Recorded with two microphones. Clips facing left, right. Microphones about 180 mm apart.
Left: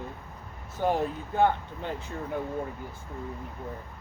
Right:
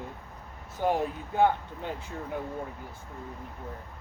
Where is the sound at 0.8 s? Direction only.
10° right (ahead or behind).